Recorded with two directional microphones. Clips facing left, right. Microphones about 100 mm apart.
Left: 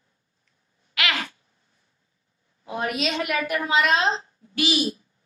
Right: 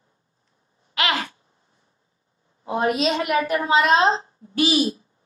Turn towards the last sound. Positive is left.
turn(degrees=-35)  # may be behind; listen again after turning